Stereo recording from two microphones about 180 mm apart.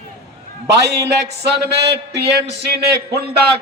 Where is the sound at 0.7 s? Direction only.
65° right (ahead or behind).